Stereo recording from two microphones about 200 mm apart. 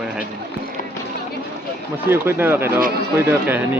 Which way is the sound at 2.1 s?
10° right (ahead or behind).